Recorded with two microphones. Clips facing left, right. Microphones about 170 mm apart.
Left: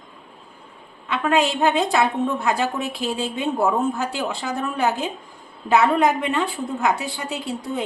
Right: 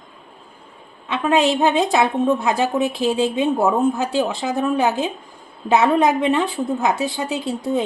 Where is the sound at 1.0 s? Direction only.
20° right (ahead or behind).